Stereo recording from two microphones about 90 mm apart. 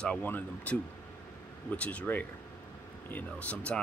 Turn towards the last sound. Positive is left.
turn(degrees=15)  # may be behind; listen again after turning